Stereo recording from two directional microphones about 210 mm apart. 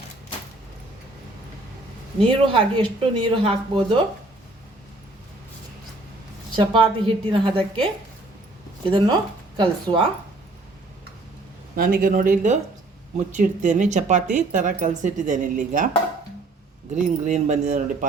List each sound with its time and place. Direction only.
2.2 s a woman's voice: 25° right (ahead or behind)
6.6 s a woman's voice: 25° right (ahead or behind)
8.9 s a woman's voice: 25° right (ahead or behind)
11.8 s speech: 40° right (ahead or behind)
16.9 s speech: 35° right (ahead or behind)